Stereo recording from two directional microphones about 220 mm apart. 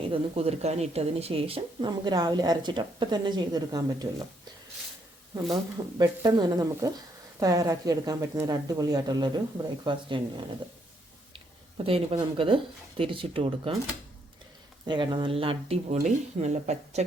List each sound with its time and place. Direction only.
0.1 s speech: 25° right (ahead or behind)
5.7 s speech: 20° right (ahead or behind)
11.8 s speech: 25° right (ahead or behind)
14.8 s speech: 20° right (ahead or behind)